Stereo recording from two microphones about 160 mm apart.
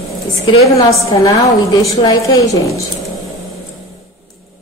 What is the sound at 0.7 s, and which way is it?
A woman's voice, 20° left (ahead or behind).